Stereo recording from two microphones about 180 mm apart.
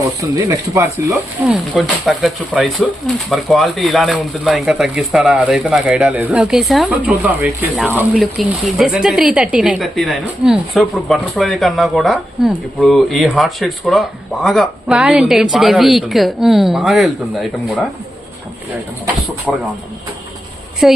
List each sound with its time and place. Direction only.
0.0 s speech: 20° right (ahead or behind)
1.5 s speech: 5° right (ahead or behind)
19.5 s speech: 5° left (ahead or behind)
20.8 s speech: centre (ahead or behind)